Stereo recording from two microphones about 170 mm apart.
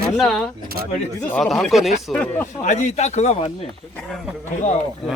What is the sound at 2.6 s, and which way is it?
Speech, 40° left (ahead or behind).